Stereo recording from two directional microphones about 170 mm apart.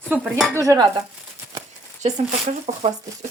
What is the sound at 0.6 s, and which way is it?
Dishes, 20° right (ahead or behind).